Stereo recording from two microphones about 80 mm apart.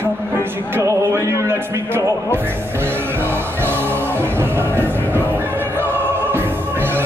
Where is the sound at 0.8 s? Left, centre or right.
Right.